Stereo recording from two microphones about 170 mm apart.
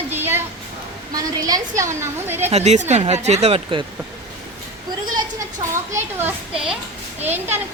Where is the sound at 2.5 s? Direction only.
40° right (ahead or behind).